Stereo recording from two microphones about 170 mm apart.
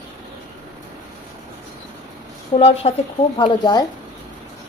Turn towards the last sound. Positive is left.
turn(degrees=25)  # may be behind; listen again after turning